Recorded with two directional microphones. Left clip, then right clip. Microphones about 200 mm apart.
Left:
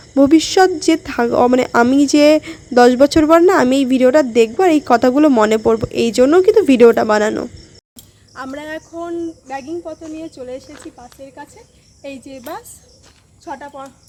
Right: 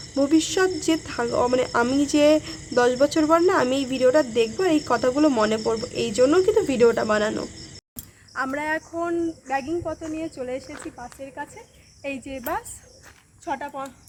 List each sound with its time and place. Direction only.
0.1 s speech: 30° left (ahead or behind)
8.4 s speech: 10° left (ahead or behind)
13.6 s speech: 45° right (ahead or behind)